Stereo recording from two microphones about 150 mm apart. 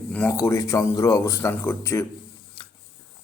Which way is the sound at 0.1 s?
15° left (ahead or behind).